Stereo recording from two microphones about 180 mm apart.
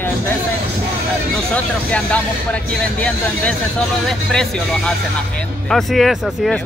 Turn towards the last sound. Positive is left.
turn(degrees=0)  # may be behind; listen again after turning